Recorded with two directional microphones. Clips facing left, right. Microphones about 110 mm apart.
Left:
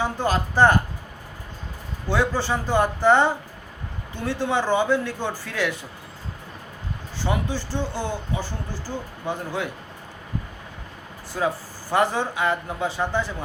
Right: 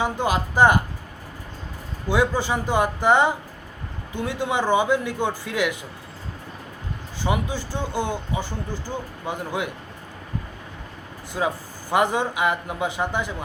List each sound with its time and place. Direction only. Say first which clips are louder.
0.0 s a man's voice: right 1 dB; 15° right (ahead or behind)
2.0 s a man's voice: right 1 dB; 15° right (ahead or behind)
7.3 s a man's voice: right 1 dB; 15° right (ahead or behind)
11.4 s a man's voice: even; 15° right (ahead or behind)